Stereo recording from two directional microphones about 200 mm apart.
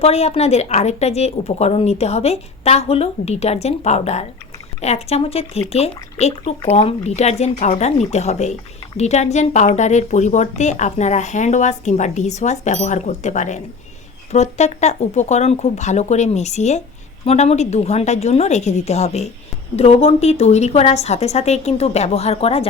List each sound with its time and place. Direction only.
0.0 s speech: 30° left (ahead or behind)